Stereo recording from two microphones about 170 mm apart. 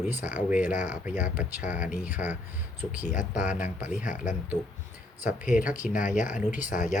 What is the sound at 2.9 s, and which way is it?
Speech, 50° left (ahead or behind).